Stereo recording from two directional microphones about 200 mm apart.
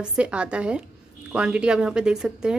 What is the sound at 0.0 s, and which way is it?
A woman's voice, 5° right (ahead or behind).